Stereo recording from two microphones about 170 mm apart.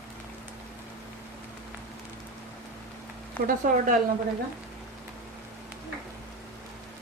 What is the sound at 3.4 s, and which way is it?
Speech, 50° right (ahead or behind).